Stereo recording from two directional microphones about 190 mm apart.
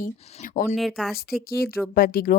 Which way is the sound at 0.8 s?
Centre (ahead or behind).